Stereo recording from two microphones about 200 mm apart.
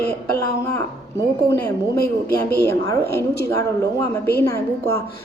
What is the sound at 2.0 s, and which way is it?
Speech, 50° left (ahead or behind).